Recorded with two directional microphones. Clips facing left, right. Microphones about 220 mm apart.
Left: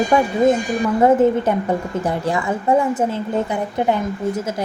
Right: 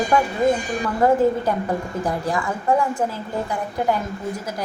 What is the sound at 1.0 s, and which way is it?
A woman's voice, 20° left (ahead or behind).